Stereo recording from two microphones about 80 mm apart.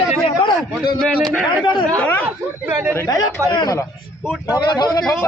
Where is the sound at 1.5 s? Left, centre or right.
Left.